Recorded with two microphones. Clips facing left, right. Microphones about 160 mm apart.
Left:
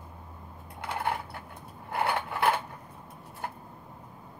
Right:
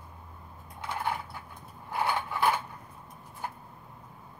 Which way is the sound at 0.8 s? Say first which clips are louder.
Left 1 dB; 60° left (ahead or behind).